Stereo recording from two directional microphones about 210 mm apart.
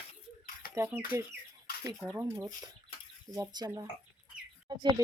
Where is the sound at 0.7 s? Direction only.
10° right (ahead or behind).